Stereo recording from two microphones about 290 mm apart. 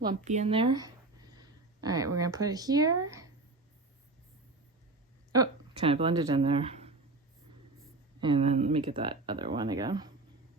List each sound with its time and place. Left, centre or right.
0.1 s speech: right
5.3 s speech: centre
8.2 s speech: centre